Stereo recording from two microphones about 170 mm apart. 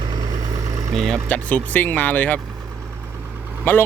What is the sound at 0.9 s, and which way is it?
Speech, 5° left (ahead or behind).